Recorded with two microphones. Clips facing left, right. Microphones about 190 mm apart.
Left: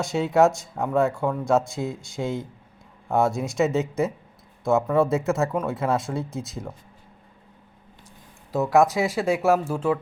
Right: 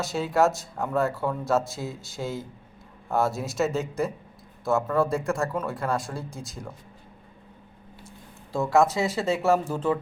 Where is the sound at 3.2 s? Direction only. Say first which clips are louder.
Left 3 dB; centre (ahead or behind).